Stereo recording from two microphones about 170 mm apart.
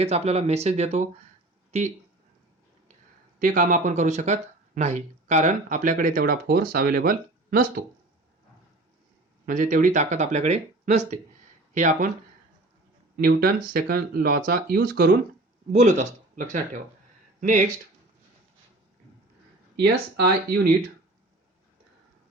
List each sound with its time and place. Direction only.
0.0 s speech: 40° right (ahead or behind)
3.4 s speech: 50° right (ahead or behind)
9.5 s speech: 50° right (ahead or behind)
13.1 s speech: 65° right (ahead or behind)
15.7 s speech: 45° right (ahead or behind)
19.8 s speech: 70° right (ahead or behind)